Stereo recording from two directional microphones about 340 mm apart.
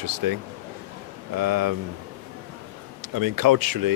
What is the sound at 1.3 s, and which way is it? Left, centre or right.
Speech, right.